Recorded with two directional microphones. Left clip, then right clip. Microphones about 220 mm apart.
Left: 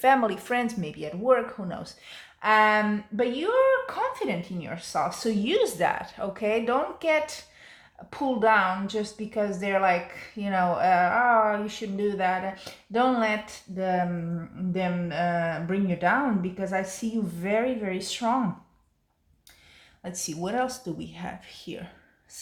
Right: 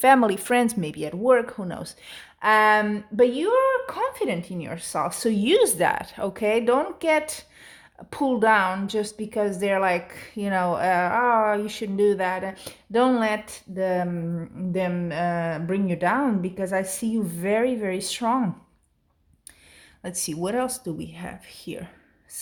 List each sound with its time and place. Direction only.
0.0 s speech: 50° right (ahead or behind)
20.0 s speech: 45° right (ahead or behind)